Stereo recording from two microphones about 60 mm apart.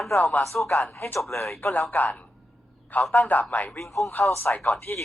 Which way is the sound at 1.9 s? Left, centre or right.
Left.